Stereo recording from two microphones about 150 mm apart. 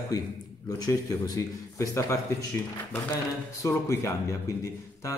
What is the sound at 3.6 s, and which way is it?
Speech, 20° left (ahead or behind).